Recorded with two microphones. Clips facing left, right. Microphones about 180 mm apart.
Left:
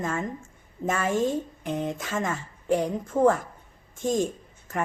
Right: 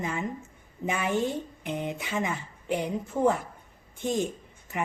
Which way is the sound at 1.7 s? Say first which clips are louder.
Left 2 dB; 5° right (ahead or behind).